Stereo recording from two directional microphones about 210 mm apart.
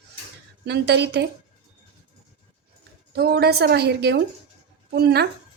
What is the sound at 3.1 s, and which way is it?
A woman's voice, 50° right (ahead or behind).